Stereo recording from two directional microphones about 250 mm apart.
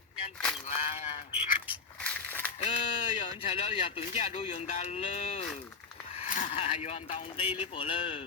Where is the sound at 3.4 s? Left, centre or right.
Left.